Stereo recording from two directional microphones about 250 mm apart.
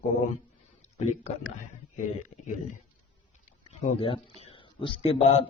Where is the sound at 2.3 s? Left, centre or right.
Left.